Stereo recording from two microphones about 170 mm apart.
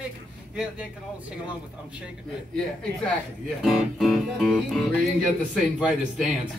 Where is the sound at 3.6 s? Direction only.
Centre (ahead or behind).